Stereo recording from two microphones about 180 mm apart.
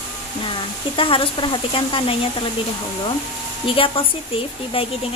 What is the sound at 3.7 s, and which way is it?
Speech, 30° left (ahead or behind).